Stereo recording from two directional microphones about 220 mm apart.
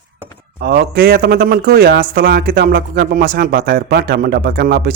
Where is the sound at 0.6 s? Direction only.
45° right (ahead or behind).